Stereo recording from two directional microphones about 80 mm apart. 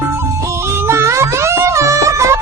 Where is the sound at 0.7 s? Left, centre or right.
Right.